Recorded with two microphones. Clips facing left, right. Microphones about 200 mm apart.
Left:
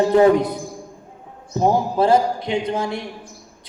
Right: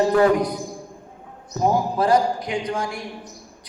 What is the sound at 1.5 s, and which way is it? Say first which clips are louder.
A man's voice: left 3 dB; 25° left (ahead or behind).